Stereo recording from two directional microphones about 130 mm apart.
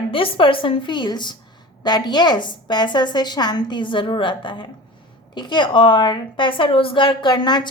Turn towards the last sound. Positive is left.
turn(degrees=35)  # may be behind; listen again after turning